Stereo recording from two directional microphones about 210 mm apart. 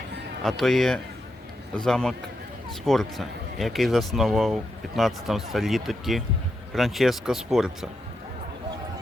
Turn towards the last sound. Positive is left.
turn(degrees=0)  # may be behind; listen again after turning